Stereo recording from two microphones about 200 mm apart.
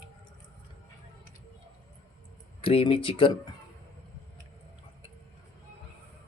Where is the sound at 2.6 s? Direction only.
25° left (ahead or behind).